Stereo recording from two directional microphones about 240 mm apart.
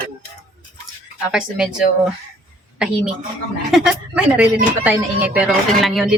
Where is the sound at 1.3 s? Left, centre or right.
Centre.